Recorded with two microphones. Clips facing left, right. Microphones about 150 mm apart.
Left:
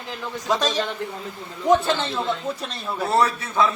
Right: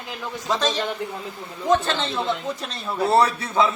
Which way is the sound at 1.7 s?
10° left (ahead or behind).